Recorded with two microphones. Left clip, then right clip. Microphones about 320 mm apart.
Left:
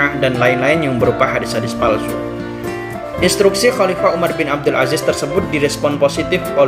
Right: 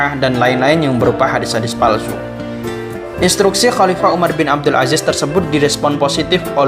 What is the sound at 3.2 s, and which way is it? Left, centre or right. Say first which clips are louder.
Speech: even; centre.